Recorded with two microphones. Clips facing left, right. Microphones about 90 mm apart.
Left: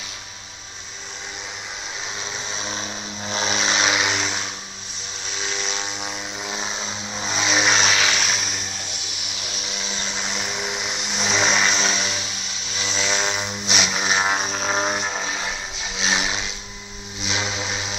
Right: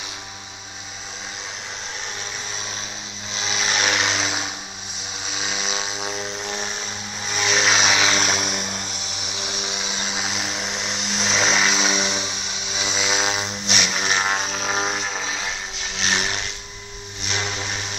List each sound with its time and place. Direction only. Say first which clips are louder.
3.3 s vehicle: left 2 dB; 35° left (ahead or behind)
3.9 s vehicle: even; 5° left (ahead or behind)
5.3 s chainsaw: right 1 dB; 5° right (ahead or behind)
6.4 s vehicle: even; 15° left (ahead or behind)
7.6 s vehicle: even; centre (ahead or behind)
8.2 s vehicle: right 3 dB; 50° right (ahead or behind)
9.6 s chainsaw: even; 20° right (ahead or behind)
10.2 s vehicle: left 1 dB; 5° right (ahead or behind)
11.9 s vehicle: right 2 dB; 20° right (ahead or behind); by 13.5 s 5° right (ahead or behind)
13.7 s vehicle: left 1 dB; 10° left (ahead or behind)
17.2 s a sound: left 1 dB; 15° left (ahead or behind)